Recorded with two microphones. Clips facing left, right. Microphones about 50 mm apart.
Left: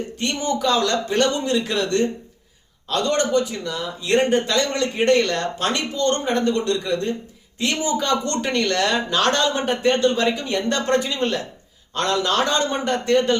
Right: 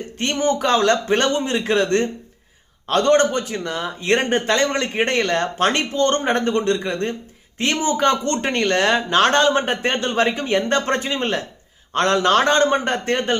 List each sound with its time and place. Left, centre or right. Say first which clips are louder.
0.2 s speech: right 4 dB; right